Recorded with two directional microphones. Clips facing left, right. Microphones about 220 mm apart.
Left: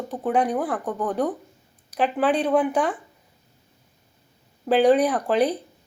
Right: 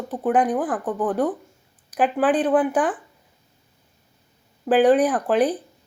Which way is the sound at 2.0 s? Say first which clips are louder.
Right 2 dB; 5° right (ahead or behind).